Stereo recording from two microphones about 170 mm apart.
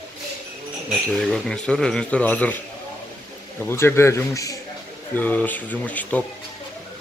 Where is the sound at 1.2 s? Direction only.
5° left (ahead or behind).